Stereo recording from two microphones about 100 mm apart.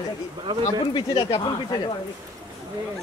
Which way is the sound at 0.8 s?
55° left (ahead or behind).